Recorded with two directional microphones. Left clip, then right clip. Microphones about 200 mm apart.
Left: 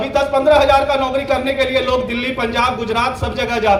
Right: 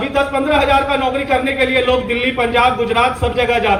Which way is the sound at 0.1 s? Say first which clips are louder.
Left 4 dB; 40° left (ahead or behind).